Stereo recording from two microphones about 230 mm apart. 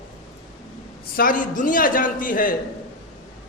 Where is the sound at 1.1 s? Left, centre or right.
Left.